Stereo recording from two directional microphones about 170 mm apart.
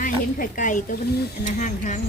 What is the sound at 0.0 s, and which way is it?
A woman's voice, 50° left (ahead or behind).